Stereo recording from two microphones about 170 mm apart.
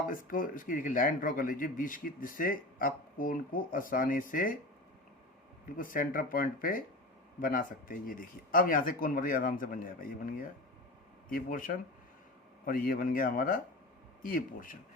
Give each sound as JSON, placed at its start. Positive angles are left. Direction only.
{"t": 0.0, "sound": "a man's voice", "side_deg": 55}
{"t": 5.6, "sound": "a man's voice", "side_deg": 55}